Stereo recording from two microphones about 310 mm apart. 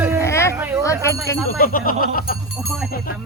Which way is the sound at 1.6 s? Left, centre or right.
Left.